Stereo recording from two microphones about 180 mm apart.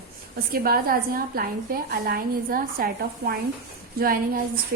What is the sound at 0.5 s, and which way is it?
A woman's voice, 55° right (ahead or behind).